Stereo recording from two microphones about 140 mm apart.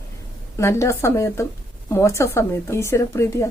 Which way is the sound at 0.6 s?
20° left (ahead or behind).